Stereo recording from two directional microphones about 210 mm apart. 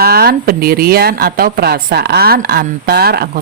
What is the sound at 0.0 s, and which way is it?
Speech, 50° right (ahead or behind).